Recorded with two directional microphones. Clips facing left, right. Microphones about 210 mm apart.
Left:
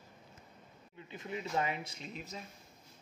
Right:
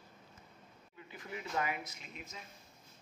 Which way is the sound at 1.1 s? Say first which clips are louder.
Left 3 dB; 25° left (ahead or behind).